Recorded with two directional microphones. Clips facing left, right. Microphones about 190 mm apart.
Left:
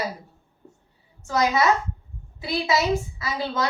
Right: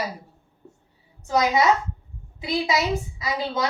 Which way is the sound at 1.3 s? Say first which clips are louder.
Right 1 dB; 15° right (ahead or behind).